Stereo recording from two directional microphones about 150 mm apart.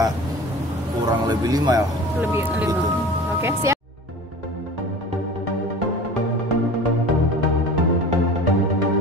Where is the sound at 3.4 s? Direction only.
15° right (ahead or behind).